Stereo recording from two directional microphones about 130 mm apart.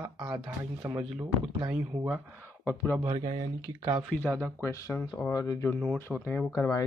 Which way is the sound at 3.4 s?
35° right (ahead or behind).